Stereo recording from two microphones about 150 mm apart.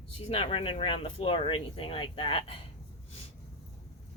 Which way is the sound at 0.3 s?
40° left (ahead or behind).